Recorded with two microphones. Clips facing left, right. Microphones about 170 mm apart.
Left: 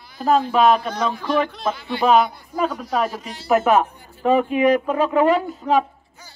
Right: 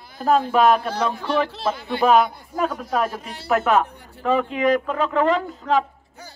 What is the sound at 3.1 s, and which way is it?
Speech, 55° right (ahead or behind).